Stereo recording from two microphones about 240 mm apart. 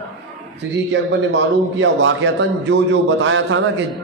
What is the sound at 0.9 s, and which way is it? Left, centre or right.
A man's voice, right.